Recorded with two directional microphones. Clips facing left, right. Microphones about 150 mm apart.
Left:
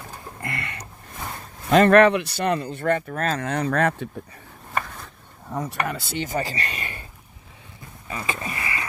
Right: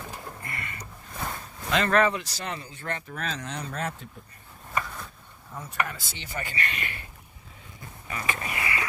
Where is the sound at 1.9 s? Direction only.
70° left (ahead or behind).